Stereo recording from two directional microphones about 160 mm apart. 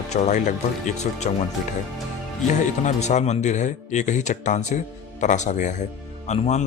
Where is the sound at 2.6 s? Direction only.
50° left (ahead or behind).